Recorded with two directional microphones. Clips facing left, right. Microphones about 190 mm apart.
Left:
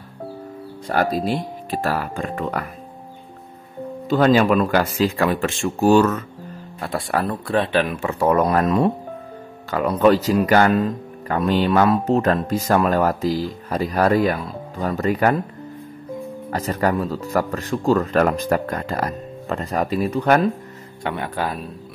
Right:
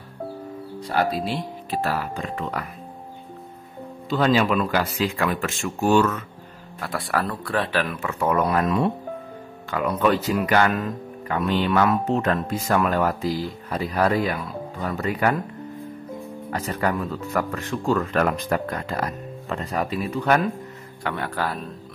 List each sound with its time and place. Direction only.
0.8 s speech: 45° left (ahead or behind)
4.1 s speech: 50° left (ahead or behind)
6.8 s speech: 25° left (ahead or behind)
16.4 s speech: 40° left (ahead or behind)
21.0 s speech: 20° left (ahead or behind)